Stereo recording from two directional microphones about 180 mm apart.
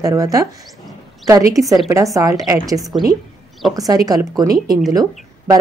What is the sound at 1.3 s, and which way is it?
A woman's voice, 20° right (ahead or behind).